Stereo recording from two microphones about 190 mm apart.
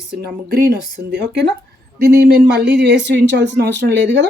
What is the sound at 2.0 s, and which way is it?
Speech, 60° right (ahead or behind).